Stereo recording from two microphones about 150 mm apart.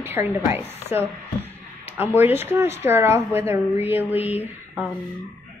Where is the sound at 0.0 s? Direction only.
15° right (ahead or behind).